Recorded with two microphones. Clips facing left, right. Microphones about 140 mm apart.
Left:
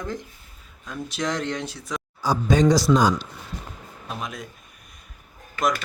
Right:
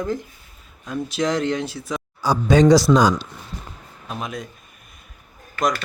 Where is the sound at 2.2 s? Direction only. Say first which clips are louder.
Right 4 dB; 75° right (ahead or behind).